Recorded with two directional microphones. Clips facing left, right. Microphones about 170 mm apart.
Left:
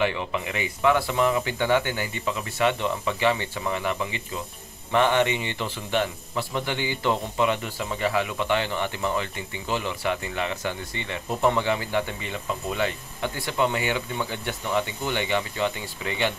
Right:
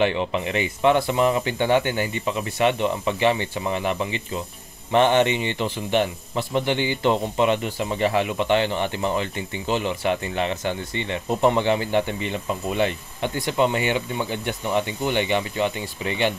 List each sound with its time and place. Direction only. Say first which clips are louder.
0.0 s speech: right 4 dB; 25° right (ahead or behind)